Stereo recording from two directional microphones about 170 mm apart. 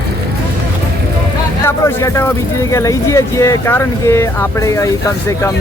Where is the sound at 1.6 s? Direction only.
15° left (ahead or behind).